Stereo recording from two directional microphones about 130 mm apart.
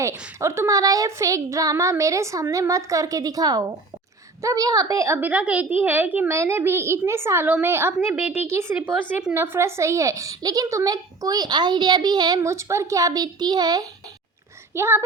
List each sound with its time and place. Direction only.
0.0 s a woman's voice: 20° right (ahead or behind)
12.4 s a woman's voice: 20° right (ahead or behind)
14.8 s speech: 15° right (ahead or behind)